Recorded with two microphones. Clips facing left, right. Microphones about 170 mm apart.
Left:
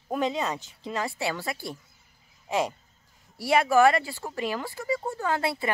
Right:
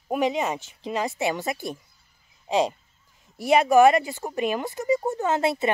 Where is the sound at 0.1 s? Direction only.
15° right (ahead or behind).